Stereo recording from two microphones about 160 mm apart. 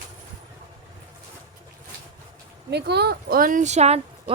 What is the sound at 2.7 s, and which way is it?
A woman's voice, 90° right.